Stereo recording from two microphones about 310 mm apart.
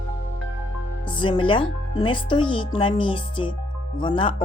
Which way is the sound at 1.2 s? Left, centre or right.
Centre.